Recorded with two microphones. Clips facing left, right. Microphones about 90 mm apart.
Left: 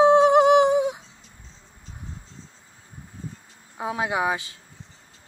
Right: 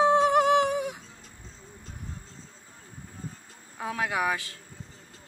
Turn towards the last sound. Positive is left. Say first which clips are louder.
# left 3 dB
turn(degrees=20)  # may be behind; listen again after turning